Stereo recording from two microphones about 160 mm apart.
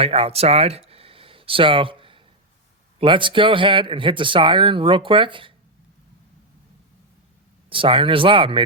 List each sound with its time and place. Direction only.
0.0 s speech: 40° right (ahead or behind)
7.7 s speech: 35° right (ahead or behind)